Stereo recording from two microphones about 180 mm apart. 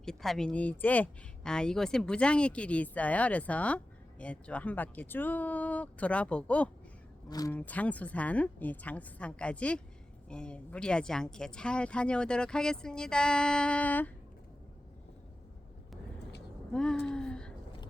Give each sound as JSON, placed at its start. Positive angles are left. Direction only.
{"t": 0.0, "sound": "speech", "side_deg": 0}
{"t": 7.3, "sound": "speech", "side_deg": 20}
{"t": 7.5, "sound": "speech", "side_deg": 10}
{"t": 16.7, "sound": "speech", "side_deg": 5}